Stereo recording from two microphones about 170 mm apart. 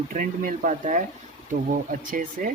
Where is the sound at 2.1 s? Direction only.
55° right (ahead or behind).